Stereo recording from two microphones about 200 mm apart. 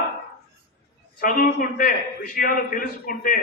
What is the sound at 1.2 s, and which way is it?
A man's voice, 45° left (ahead or behind).